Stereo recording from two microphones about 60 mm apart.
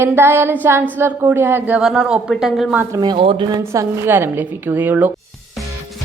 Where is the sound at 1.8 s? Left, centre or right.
Centre.